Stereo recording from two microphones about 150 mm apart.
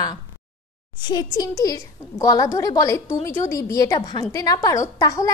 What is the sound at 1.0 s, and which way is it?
A woman's voice, 25° left (ahead or behind).